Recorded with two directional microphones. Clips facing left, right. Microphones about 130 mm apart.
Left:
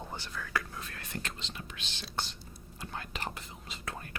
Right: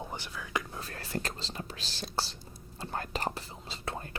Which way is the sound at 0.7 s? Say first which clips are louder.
Right 5 dB; 35° right (ahead or behind).